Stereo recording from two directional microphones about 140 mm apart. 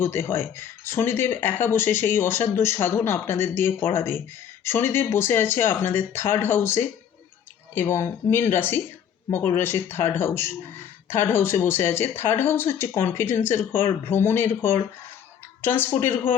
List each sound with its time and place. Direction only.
0.0 s speech: 15° left (ahead or behind)